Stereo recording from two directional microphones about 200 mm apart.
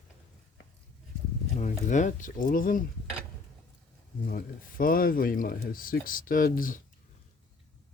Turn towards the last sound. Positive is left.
turn(degrees=45)  # may be behind; listen again after turning